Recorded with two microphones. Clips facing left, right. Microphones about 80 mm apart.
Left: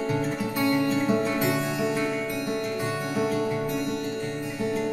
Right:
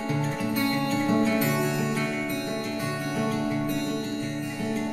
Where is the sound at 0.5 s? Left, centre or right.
Centre.